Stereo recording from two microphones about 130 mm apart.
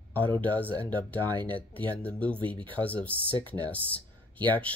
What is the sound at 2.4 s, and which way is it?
Speech, 40° right (ahead or behind).